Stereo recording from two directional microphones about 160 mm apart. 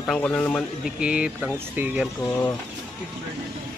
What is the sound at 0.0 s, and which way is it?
Speech, 5° left (ahead or behind).